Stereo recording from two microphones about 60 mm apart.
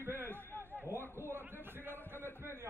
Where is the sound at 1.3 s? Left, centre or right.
Right.